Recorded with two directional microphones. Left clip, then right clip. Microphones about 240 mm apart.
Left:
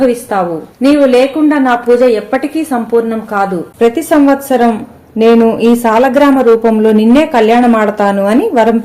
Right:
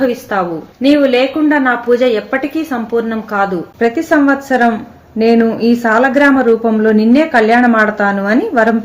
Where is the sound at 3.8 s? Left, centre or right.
Centre.